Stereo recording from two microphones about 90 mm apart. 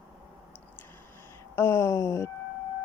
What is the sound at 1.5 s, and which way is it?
Speech, 30° left (ahead or behind).